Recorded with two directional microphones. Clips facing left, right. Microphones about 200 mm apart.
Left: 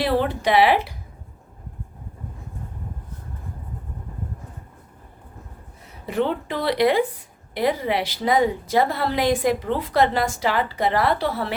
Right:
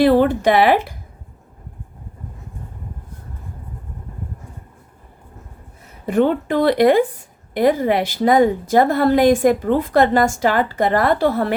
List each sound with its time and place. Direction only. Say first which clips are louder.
0.0 s a woman's voice: right 8 dB; 50° right (ahead or behind)
6.1 s a woman's voice: right 7 dB; 50° right (ahead or behind)